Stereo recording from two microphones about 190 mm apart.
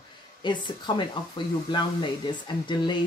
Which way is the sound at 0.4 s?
25° left (ahead or behind).